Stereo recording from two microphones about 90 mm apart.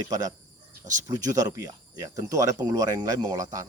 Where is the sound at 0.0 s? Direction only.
40° right (ahead or behind).